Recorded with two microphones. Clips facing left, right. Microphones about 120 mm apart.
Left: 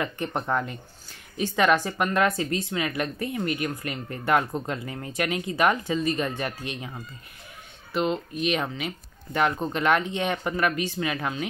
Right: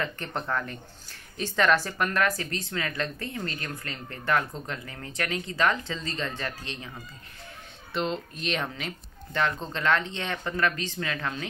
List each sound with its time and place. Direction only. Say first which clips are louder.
0.0 s speech: left 3 dB; 15° left (ahead or behind)
7.9 s speech: left 4 dB; 5° left (ahead or behind)